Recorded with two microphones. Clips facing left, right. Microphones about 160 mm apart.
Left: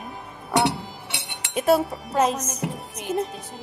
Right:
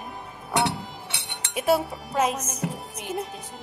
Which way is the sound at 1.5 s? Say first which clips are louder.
Left 3 dB; 5° right (ahead or behind).